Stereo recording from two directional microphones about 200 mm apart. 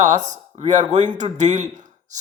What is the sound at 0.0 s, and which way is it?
Speech, 35° right (ahead or behind).